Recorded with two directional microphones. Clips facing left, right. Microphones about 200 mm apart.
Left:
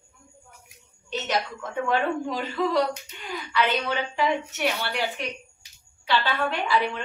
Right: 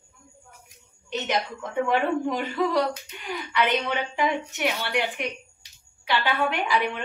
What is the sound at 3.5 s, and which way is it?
A woman's voice, 15° right (ahead or behind).